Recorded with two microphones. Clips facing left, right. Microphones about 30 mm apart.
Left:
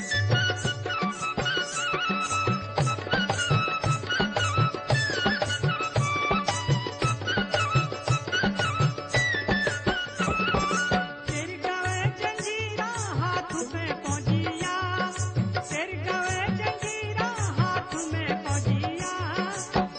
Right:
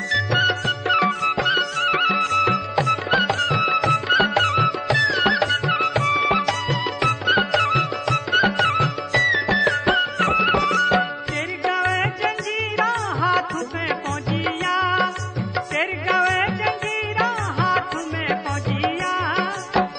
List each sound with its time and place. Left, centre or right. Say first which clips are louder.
0.1 s music: right 7 dB; right